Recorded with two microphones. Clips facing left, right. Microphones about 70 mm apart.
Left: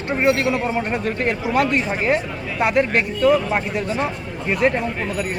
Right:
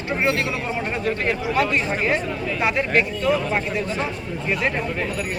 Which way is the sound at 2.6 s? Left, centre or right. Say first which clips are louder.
Left 3 dB; left.